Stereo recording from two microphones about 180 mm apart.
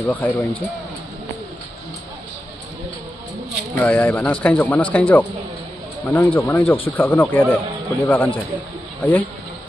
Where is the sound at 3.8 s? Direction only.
10° left (ahead or behind).